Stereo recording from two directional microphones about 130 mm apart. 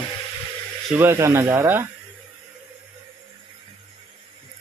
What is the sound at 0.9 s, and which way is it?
Speech, 20° right (ahead or behind).